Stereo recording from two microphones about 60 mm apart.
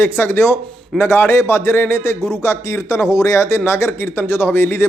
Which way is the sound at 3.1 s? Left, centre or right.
Left.